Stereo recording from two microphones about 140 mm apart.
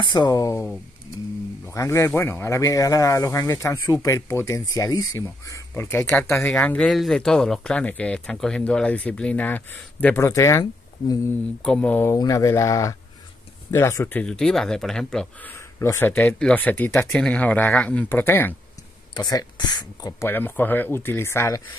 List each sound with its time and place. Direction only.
0.1 s speech: 30° left (ahead or behind)
1.7 s speech: 20° left (ahead or behind)
11.6 s speech: 5° left (ahead or behind)
12.2 s speech: 25° left (ahead or behind); by 15.5 s 5° left (ahead or behind)
15.8 s speech: 20° left (ahead or behind)
19.1 s speech: 30° left (ahead or behind)